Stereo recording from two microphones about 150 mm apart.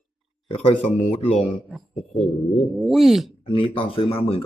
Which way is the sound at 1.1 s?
45° left (ahead or behind).